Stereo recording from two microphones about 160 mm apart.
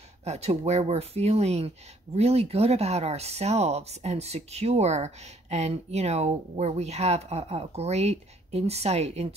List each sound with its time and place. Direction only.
0.2 s speech: 40° right (ahead or behind)